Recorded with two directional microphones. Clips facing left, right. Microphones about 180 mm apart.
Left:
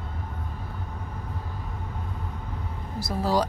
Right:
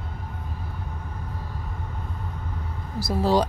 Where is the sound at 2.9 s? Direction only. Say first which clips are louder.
Right 3 dB; 30° right (ahead or behind).